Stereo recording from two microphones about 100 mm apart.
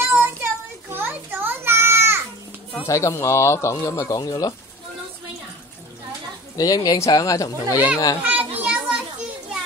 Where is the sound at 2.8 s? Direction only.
30° left (ahead or behind).